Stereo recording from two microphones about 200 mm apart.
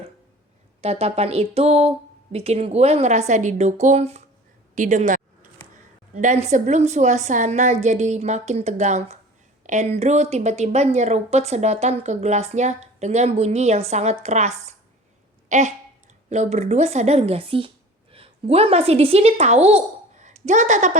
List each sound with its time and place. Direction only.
0.8 s speech: 30° right (ahead or behind)
4.7 s a sound: 40° right (ahead or behind)
6.1 s a woman's voice: 35° right (ahead or behind)